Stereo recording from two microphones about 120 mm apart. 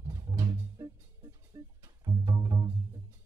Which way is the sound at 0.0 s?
35° right (ahead or behind).